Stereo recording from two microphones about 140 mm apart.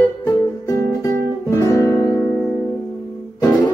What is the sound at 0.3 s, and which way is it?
Guitar, 20° left (ahead or behind).